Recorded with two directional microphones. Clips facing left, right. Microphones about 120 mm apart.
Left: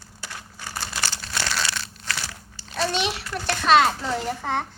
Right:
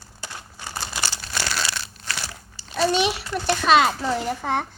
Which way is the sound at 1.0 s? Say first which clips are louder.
Even; 10° right (ahead or behind).